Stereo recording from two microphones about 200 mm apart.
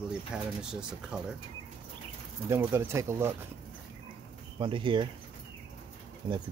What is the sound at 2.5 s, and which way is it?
Speech, 10° right (ahead or behind).